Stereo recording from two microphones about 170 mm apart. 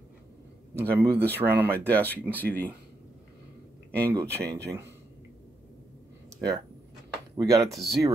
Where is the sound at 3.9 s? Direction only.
15° right (ahead or behind).